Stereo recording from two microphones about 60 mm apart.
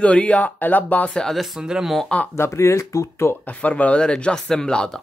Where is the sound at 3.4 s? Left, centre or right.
Left.